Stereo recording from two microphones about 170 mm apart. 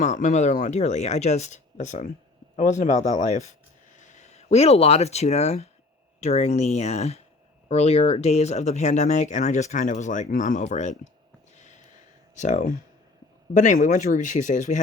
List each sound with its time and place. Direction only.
0.0 s speech: 45° left (ahead or behind)
11.5 s a sound: 45° left (ahead or behind)
12.4 s speech: 45° left (ahead or behind)